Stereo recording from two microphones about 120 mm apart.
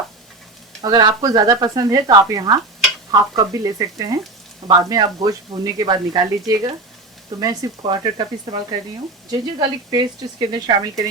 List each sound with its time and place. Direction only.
0.8 s speech: 35° right (ahead or behind)
9.3 s speech: 35° right (ahead or behind)